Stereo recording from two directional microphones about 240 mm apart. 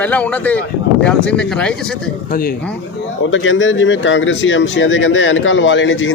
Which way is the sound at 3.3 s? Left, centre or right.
Left.